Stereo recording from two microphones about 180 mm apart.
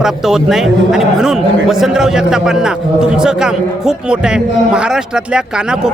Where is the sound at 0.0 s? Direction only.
Centre (ahead or behind).